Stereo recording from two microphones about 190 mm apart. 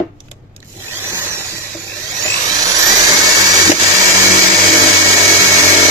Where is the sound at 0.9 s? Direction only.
15° right (ahead or behind).